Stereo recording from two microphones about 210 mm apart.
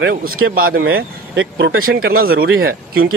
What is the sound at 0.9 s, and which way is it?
Speech, 60° right (ahead or behind).